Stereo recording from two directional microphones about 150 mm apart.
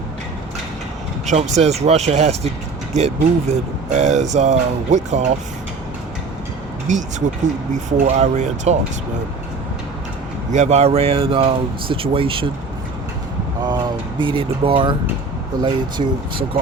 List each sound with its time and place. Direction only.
1.3 s speech: 50° right (ahead or behind)
6.9 s speech: 55° right (ahead or behind)
10.5 s speech: 50° right (ahead or behind)
13.7 s speech: 30° right (ahead or behind)